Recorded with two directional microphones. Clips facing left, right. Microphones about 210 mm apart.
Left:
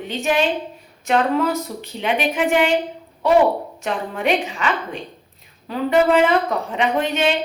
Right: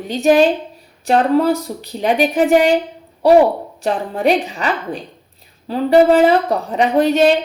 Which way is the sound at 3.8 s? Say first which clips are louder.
Right 5 dB; 35° right (ahead or behind).